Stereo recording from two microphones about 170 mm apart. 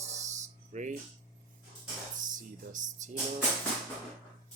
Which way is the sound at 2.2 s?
50° right (ahead or behind).